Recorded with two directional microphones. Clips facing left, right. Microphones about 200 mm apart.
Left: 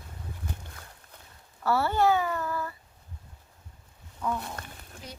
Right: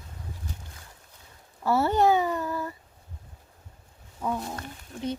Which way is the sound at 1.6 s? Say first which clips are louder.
Right 2 dB; 20° right (ahead or behind).